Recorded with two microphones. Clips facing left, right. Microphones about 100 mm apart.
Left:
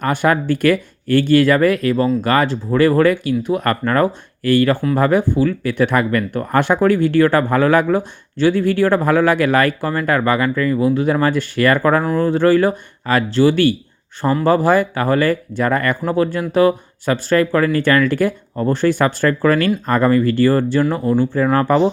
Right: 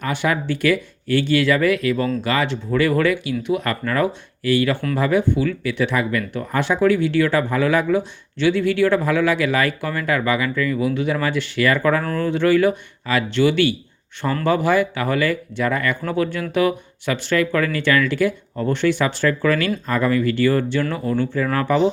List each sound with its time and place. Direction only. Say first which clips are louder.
0.0 s speech: left 5 dB; 45° left (ahead or behind)
16.0 s speech: left 4 dB; 35° left (ahead or behind)
20.9 s speech: left 5 dB; 30° left (ahead or behind)